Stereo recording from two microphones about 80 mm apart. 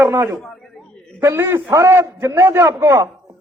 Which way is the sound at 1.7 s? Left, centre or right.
Right.